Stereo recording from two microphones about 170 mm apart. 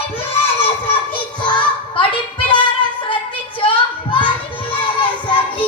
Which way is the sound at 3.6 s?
30° left (ahead or behind).